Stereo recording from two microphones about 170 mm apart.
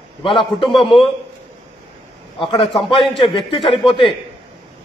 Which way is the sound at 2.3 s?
30° left (ahead or behind).